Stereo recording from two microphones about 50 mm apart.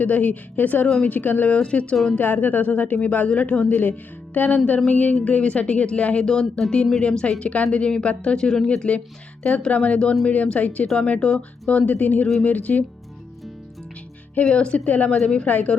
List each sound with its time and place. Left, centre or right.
0.0 s speech: left
1.5 s speech: left
2.1 s speech: left
6.2 s speech: centre
11.2 s speech: centre
11.7 s speech: left
14.5 s speech: left
15.2 s speech: centre
15.4 s speech: left